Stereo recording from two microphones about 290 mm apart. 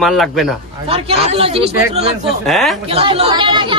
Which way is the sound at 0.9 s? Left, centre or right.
Centre.